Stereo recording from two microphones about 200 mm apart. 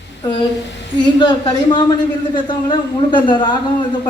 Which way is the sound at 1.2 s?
20° left (ahead or behind).